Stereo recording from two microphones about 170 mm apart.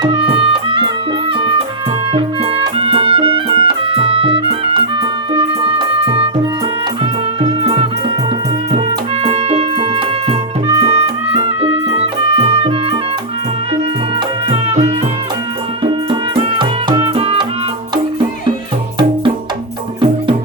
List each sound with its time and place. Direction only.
0.0 s music: 35° right (ahead or behind)
9.2 s music: 35° right (ahead or behind)
14.5 s music: 35° right (ahead or behind)